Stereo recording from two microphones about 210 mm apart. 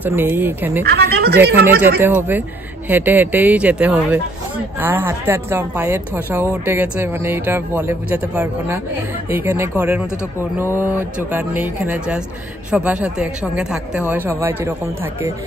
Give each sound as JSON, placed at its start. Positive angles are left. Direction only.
{"t": 0.0, "sound": "a woman's voice", "side_deg": -10}
{"t": 0.8, "sound": "speech", "side_deg": -50}
{"t": 1.8, "sound": "a woman's voice", "side_deg": -10}